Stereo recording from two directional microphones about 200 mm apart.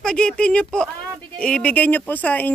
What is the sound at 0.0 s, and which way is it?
Speech, 5° left (ahead or behind).